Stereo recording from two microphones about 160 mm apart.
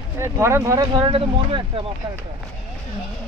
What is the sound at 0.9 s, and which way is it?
Speech, 30° right (ahead or behind).